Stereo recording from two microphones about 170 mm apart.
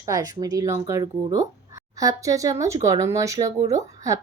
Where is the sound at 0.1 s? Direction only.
20° right (ahead or behind).